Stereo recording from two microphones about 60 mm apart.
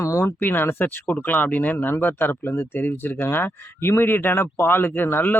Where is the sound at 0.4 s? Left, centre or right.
Left.